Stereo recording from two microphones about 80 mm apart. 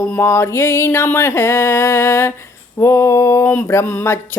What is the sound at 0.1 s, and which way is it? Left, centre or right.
Speech, left.